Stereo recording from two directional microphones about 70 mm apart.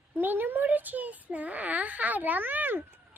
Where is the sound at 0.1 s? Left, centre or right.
Right.